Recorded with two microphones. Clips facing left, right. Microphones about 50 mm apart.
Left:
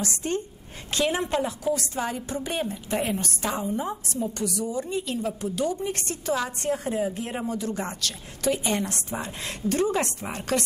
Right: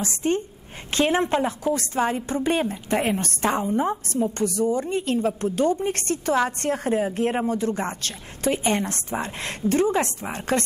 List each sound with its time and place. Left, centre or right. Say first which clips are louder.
0.9 s a woman's voice: right 4 dB; right